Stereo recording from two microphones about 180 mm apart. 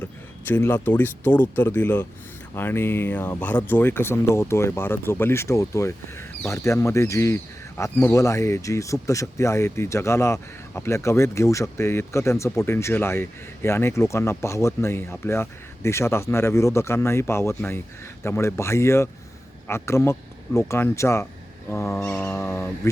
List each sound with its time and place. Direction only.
0.0 s speech: 10° left (ahead or behind)